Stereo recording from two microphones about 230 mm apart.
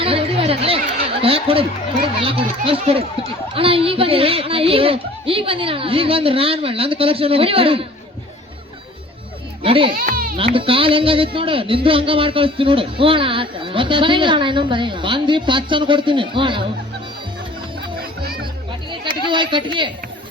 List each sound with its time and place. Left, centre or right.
0.0 s chatter: right
1.2 s a sound: right
2.2 s speech: right
9.6 s speech: right
9.9 s goat: right
10.3 s speech: right
19.3 s speech: right